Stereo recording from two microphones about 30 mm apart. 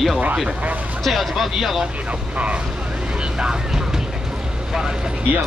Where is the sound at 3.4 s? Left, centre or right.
Right.